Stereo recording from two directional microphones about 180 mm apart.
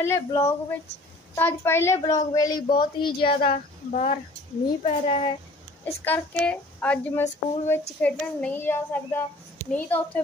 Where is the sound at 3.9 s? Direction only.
40° left (ahead or behind).